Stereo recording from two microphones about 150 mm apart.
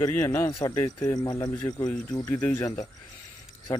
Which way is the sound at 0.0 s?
15° left (ahead or behind).